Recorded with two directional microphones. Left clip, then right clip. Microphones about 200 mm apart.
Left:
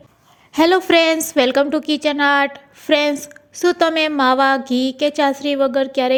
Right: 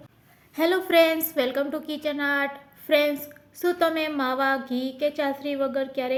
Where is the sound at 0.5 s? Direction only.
40° left (ahead or behind).